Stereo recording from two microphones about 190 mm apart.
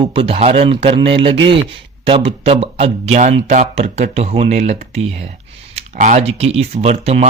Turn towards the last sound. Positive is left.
turn(degrees=-35)  # may be behind; listen again after turning